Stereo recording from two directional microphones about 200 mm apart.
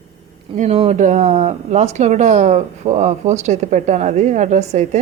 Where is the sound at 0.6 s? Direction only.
30° right (ahead or behind).